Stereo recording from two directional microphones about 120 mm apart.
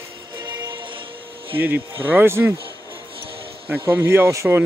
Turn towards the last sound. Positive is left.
turn(degrees=-20)  # may be behind; listen again after turning